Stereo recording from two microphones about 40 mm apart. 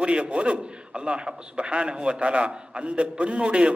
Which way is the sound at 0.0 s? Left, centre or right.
Right.